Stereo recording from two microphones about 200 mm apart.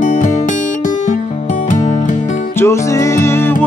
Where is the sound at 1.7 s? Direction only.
35° left (ahead or behind).